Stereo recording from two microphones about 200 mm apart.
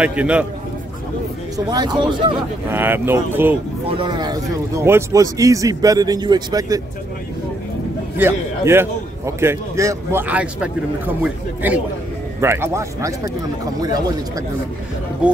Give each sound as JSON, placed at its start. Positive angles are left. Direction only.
{"t": 0.0, "sound": "a man's voice", "side_deg": -5}
{"t": 1.7, "sound": "speech", "side_deg": -20}
{"t": 2.7, "sound": "a man's voice", "side_deg": -10}
{"t": 3.9, "sound": "a man's voice", "side_deg": -20}
{"t": 8.2, "sound": "a man's voice", "side_deg": -10}